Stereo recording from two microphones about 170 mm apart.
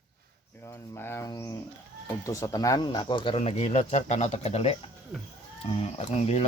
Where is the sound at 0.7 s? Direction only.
15° left (ahead or behind).